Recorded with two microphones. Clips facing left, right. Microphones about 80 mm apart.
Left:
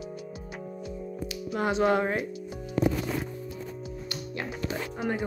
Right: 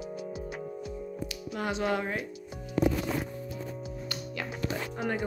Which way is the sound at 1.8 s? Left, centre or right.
Left.